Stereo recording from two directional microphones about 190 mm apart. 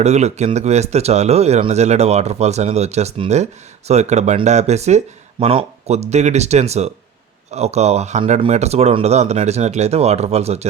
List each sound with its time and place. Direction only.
0.0 s speech: 35° right (ahead or behind)